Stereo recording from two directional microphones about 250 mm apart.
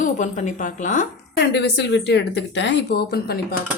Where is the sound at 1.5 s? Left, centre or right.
Left.